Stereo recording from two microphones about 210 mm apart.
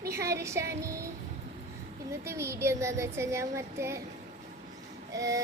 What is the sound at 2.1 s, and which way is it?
A woman's voice, 15° right (ahead or behind).